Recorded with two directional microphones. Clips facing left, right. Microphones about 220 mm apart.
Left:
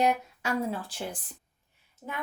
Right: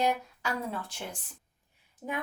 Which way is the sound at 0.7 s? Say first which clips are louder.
Left 4 dB; 30° left (ahead or behind).